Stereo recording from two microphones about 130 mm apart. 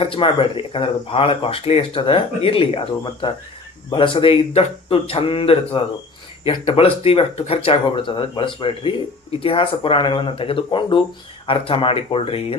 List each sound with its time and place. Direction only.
0.0 s speech: 40° left (ahead or behind)